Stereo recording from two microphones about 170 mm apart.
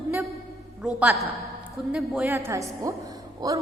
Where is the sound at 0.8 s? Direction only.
5° right (ahead or behind).